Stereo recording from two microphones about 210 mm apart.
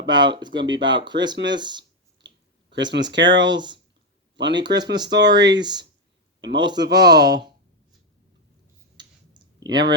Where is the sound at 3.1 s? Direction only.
60° right (ahead or behind).